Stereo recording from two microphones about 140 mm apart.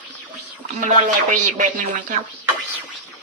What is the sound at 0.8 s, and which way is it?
Speech, 65° right (ahead or behind).